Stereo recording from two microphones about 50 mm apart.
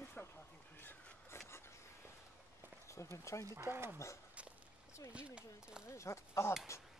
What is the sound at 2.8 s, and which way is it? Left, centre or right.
Speech, left.